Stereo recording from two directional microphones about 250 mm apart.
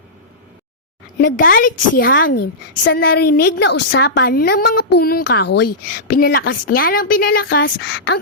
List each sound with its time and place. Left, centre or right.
1.2 s a woman's voice: left